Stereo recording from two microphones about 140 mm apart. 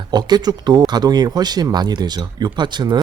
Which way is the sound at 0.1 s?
30° right (ahead or behind).